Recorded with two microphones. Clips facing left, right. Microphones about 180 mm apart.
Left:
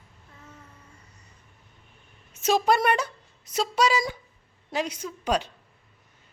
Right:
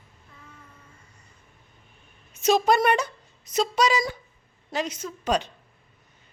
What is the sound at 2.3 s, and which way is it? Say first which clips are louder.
A woman's voice: right 2 dB; 5° left (ahead or behind).